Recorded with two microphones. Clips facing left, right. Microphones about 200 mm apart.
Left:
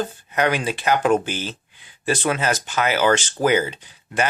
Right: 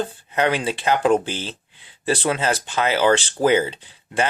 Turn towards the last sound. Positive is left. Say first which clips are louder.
# right 1 dB
turn(degrees=-30)  # may be behind; listen again after turning